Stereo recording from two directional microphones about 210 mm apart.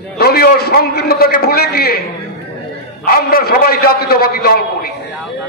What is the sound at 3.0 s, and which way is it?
A man's voice, 45° left (ahead or behind).